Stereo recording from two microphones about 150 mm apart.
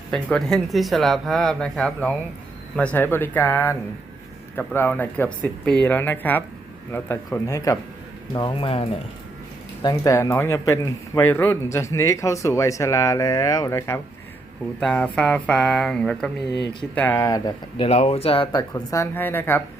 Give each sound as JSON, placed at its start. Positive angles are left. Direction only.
{"t": 0.1, "sound": "a man's voice", "side_deg": 5}
{"t": 9.8, "sound": "a man's voice", "side_deg": 25}
{"t": 14.8, "sound": "speech", "side_deg": 5}
{"t": 17.2, "sound": "a man's voice", "side_deg": 25}
{"t": 17.7, "sound": "speech", "side_deg": 45}
{"t": 18.7, "sound": "speech", "side_deg": 20}